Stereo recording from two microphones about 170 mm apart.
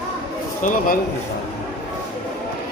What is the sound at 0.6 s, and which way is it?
Speech, 50° left (ahead or behind).